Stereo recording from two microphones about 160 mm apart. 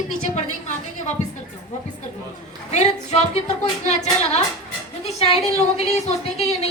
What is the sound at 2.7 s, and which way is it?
A woman's voice, 45° left (ahead or behind).